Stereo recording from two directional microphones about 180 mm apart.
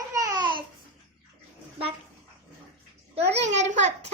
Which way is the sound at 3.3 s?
40° right (ahead or behind).